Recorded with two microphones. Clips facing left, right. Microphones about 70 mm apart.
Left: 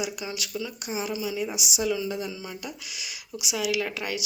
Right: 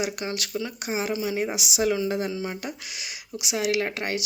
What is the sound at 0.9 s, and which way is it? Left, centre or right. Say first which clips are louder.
Speech: right 4 dB; right.